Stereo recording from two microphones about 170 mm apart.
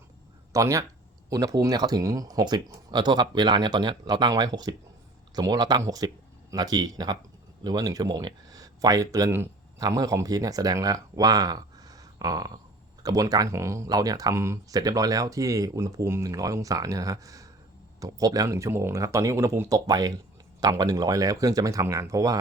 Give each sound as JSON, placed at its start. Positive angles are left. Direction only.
{"t": 0.5, "sound": "speech", "side_deg": -20}